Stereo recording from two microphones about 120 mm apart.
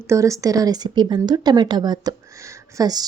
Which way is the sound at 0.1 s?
25° right (ahead or behind).